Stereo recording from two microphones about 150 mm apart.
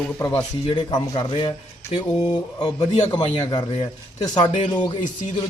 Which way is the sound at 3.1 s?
25° left (ahead or behind).